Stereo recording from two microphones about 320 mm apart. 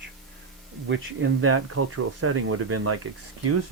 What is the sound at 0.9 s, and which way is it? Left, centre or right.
Speech, right.